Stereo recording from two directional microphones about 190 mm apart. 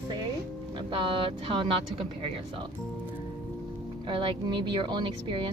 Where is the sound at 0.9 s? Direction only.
25° right (ahead or behind).